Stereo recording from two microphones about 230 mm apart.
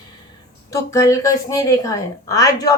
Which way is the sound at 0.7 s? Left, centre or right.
Centre.